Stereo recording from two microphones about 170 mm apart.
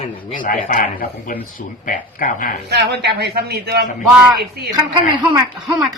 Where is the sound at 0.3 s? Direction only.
50° left (ahead or behind).